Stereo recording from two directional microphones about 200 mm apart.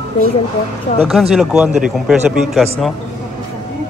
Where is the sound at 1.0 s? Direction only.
Centre (ahead or behind).